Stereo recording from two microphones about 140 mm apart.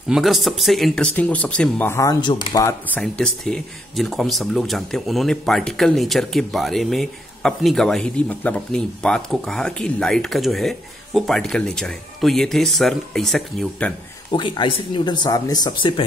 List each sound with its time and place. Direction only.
0.1 s speech: centre (ahead or behind); by 2.7 s 25° left (ahead or behind)
2.9 s speech: 5° left (ahead or behind)
14.3 s speech: 35° left (ahead or behind)